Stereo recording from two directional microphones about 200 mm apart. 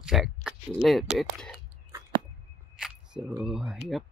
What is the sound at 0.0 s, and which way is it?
Speech, centre (ahead or behind).